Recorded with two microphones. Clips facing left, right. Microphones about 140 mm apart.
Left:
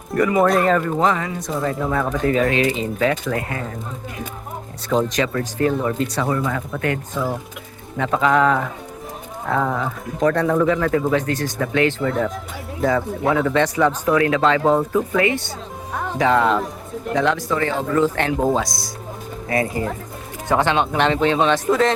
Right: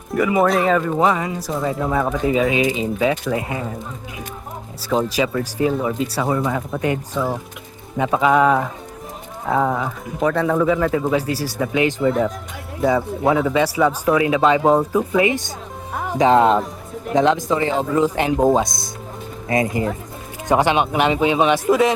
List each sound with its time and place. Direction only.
0.1 s speech: centre (ahead or behind)
4.8 s speech: 5° right (ahead or behind)
6.2 s speech: 20° right (ahead or behind)
13.4 s speech: 5° right (ahead or behind)